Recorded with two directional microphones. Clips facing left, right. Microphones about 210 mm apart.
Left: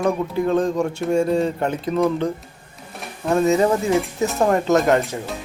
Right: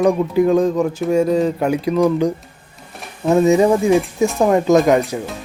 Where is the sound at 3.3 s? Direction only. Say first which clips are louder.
Right 4 dB; 15° right (ahead or behind).